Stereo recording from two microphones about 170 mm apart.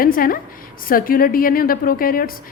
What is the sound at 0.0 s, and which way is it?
A woman's voice, 55° left (ahead or behind).